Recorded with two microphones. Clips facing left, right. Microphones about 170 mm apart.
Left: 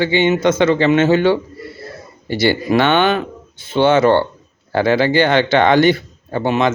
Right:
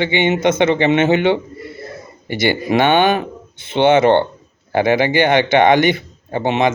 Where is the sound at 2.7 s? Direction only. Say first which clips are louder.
Right 2 dB; 15° right (ahead or behind).